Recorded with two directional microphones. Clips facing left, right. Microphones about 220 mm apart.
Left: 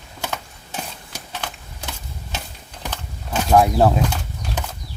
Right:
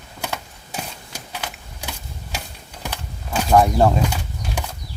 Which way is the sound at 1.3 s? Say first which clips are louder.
Left 1 dB; 10° right (ahead or behind).